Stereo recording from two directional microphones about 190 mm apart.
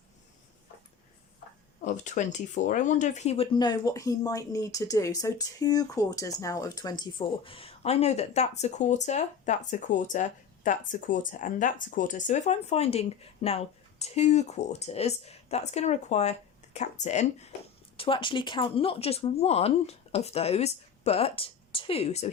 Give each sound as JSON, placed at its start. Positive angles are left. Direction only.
{"t": 1.8, "sound": "speech", "side_deg": 40}